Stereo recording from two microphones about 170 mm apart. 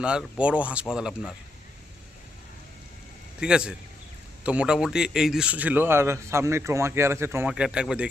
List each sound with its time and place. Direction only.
0.0 s speech: 5° right (ahead or behind)
3.4 s a man's voice: 5° right (ahead or behind)